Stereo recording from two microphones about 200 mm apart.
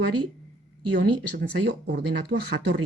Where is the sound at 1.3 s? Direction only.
60° right (ahead or behind).